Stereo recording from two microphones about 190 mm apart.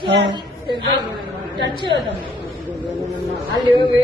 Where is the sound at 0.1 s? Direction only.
65° right (ahead or behind).